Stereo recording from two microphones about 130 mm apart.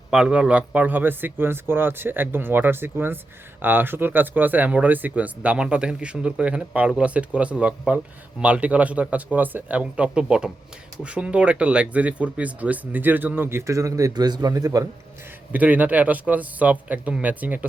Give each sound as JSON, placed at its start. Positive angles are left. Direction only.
{"t": 0.1, "sound": "speech", "side_deg": -5}
{"t": 15.5, "sound": "speech", "side_deg": -10}